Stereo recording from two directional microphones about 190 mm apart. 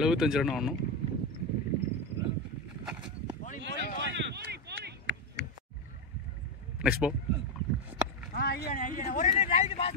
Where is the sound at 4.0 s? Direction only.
65° right (ahead or behind).